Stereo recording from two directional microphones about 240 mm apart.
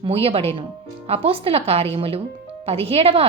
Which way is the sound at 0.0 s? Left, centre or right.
Right.